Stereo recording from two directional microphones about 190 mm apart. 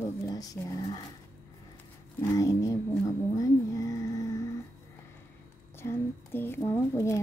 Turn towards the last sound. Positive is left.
turn(degrees=15)  # may be behind; listen again after turning